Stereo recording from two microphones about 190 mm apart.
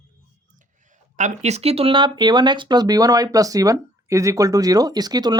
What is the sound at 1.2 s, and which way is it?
Speech, 35° right (ahead or behind).